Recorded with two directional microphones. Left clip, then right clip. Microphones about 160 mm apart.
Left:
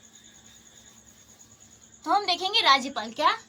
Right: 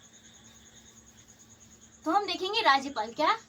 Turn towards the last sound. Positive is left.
turn(degrees=20)  # may be behind; listen again after turning